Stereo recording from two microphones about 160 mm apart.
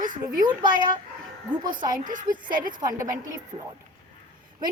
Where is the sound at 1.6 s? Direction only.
55° right (ahead or behind).